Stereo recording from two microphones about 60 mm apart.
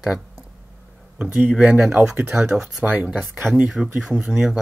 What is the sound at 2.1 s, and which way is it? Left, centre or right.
Speech, right.